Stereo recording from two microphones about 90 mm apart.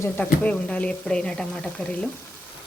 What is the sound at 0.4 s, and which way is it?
Speech, 15° left (ahead or behind).